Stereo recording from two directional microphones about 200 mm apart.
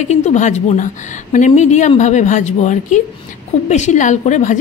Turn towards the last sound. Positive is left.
turn(degrees=40)  # may be behind; listen again after turning